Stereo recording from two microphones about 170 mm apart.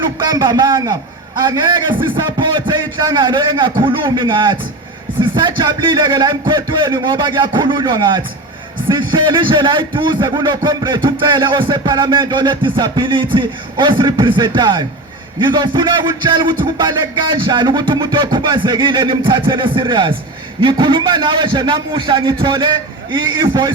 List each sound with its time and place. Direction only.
0.2 s music: 25° right (ahead or behind)